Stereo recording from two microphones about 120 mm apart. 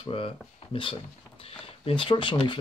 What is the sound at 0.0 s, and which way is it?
Speech, 50° left (ahead or behind).